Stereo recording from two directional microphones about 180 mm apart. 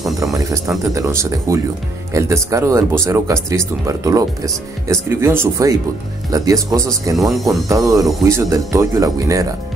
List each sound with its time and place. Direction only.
0.2 s speech: 20° right (ahead or behind)
7.2 s speech: centre (ahead or behind)
7.6 s speech: 20° right (ahead or behind)